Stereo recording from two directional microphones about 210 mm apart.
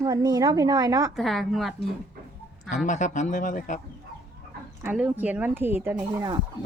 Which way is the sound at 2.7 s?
35° left (ahead or behind).